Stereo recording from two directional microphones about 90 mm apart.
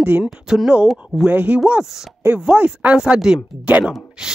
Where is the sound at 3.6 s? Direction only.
15° right (ahead or behind).